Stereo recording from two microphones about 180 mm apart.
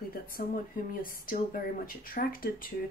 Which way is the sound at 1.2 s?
50° left (ahead or behind).